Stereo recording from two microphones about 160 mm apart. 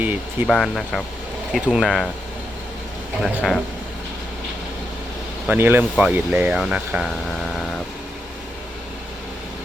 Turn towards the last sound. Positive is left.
turn(degrees=0)  # may be behind; listen again after turning